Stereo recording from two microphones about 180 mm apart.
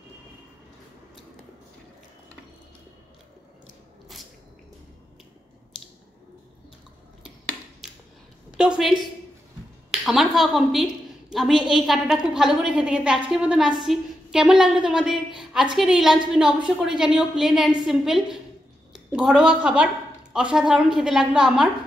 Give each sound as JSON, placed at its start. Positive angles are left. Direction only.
{"t": 8.5, "sound": "a woman's voice", "side_deg": -5}